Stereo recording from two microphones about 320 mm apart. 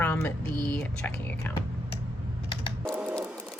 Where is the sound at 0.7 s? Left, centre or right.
Centre.